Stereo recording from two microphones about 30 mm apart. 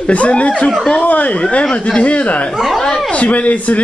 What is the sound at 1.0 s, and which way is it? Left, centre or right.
Speech, left.